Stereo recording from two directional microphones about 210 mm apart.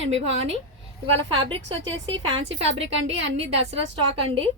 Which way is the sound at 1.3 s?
25° right (ahead or behind).